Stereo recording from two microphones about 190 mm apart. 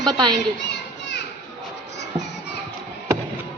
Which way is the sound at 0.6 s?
65° left (ahead or behind).